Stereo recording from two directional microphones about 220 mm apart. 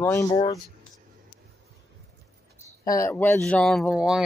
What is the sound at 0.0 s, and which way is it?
Speech, 10° left (ahead or behind).